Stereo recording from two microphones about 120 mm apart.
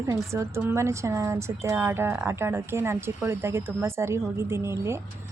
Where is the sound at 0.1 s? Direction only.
25° right (ahead or behind).